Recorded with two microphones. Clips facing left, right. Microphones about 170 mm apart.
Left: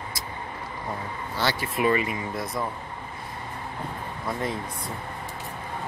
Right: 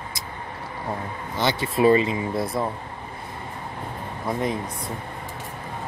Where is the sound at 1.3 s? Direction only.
20° right (ahead or behind).